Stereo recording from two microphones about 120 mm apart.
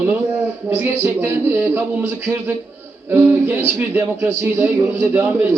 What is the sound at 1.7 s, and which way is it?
A man's voice, 20° right (ahead or behind).